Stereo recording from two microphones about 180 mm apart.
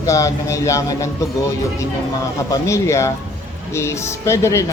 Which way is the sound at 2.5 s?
15° left (ahead or behind).